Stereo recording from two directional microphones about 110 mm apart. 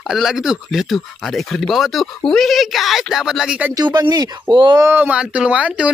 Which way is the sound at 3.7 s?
40° right (ahead or behind).